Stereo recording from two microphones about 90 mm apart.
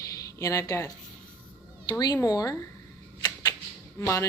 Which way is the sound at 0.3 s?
35° left (ahead or behind).